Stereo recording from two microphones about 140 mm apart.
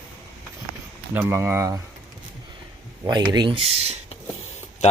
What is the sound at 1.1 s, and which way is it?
Speech, 15° right (ahead or behind).